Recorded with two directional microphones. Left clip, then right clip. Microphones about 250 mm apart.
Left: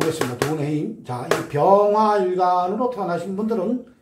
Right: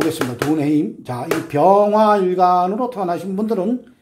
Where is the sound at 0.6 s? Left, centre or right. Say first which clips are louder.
Right 7 dB; right.